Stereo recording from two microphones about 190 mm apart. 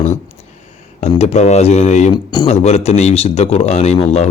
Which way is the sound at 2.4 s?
35° left (ahead or behind).